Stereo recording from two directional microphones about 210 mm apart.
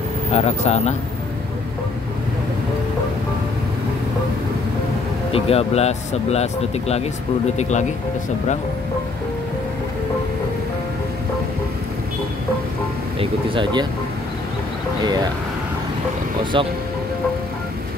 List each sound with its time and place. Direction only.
0.3 s speech: 30° left (ahead or behind)
5.3 s speech: 30° left (ahead or behind)
13.2 s speech: 20° right (ahead or behind)
16.5 s speech: 25° right (ahead or behind)